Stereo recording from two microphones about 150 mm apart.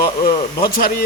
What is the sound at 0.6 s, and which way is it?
Speech, 85° left.